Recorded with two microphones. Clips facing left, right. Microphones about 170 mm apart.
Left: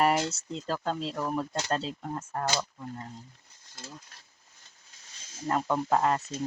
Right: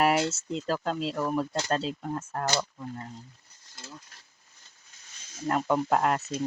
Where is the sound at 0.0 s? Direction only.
5° right (ahead or behind).